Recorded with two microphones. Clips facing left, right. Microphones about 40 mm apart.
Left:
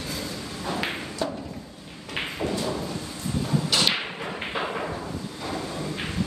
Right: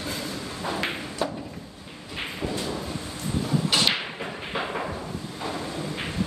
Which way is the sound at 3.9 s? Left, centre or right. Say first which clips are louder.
Left 1 dB; centre.